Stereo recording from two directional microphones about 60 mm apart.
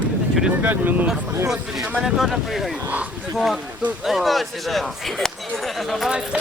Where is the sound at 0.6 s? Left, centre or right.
Right.